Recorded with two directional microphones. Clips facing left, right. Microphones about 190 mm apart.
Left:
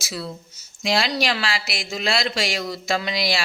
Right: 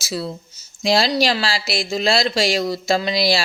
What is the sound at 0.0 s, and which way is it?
Speech, 35° right (ahead or behind).